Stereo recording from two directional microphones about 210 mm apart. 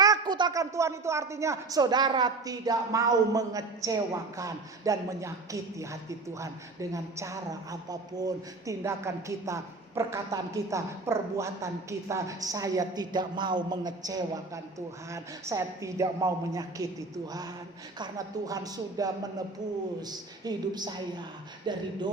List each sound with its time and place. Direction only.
0.0 s speech: 20° right (ahead or behind)
18.0 s a man's voice: 15° right (ahead or behind)